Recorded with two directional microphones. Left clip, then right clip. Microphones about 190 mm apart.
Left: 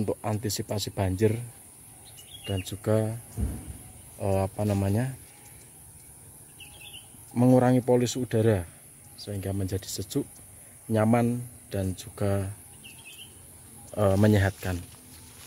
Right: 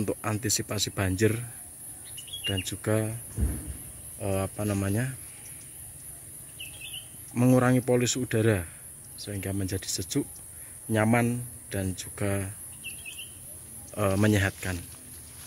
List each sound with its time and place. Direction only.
0.0 s speech: 10° left (ahead or behind)
2.4 s speech: 15° left (ahead or behind)
4.2 s speech: 25° left (ahead or behind)
7.3 s speech: 15° left (ahead or behind)
13.9 s speech: 25° left (ahead or behind)